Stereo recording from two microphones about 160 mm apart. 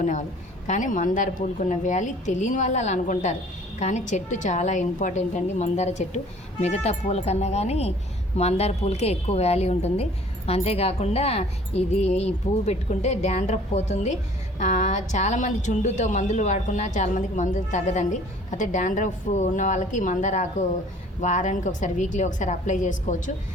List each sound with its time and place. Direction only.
0.0 s a woman's voice: 55° left (ahead or behind)